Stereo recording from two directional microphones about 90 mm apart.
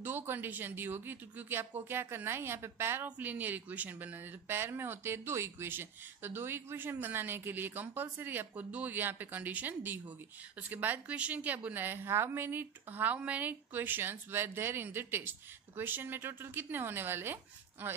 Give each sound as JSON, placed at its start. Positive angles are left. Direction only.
{"t": 0.0, "sound": "a woman's voice", "side_deg": -25}